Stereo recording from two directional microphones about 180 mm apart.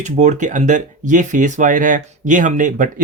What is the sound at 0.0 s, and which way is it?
Speech, 40° right (ahead or behind).